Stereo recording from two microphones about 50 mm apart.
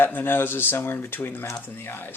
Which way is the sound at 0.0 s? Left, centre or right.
Left.